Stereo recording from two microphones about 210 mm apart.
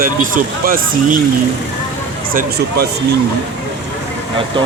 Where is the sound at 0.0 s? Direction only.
40° right (ahead or behind).